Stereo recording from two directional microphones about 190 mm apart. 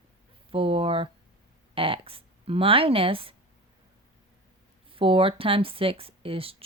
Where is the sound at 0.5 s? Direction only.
30° right (ahead or behind).